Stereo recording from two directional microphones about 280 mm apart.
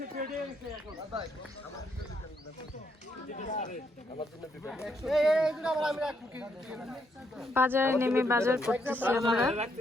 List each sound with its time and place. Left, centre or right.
0.0 s a sound: right
3.3 s speech: left
4.6 s speech: centre